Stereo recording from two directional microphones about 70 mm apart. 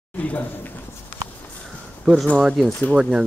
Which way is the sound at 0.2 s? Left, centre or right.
Left.